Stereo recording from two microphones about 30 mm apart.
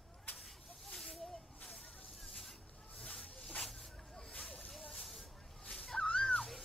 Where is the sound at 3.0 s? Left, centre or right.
Left.